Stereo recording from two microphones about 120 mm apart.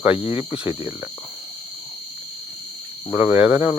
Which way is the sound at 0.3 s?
10° right (ahead or behind).